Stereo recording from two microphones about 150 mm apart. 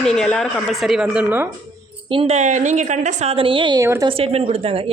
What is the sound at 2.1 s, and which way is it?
A woman's voice, 40° right (ahead or behind).